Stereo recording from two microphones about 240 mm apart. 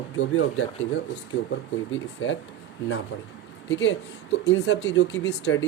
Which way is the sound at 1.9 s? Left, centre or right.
Left.